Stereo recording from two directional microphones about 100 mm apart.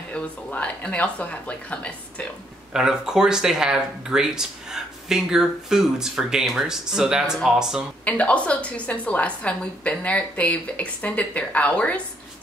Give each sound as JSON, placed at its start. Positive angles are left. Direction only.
{"t": 0.1, "sound": "a woman's voice", "side_deg": 10}
{"t": 2.7, "sound": "speech", "side_deg": -5}
{"t": 8.0, "sound": "a woman's voice", "side_deg": 15}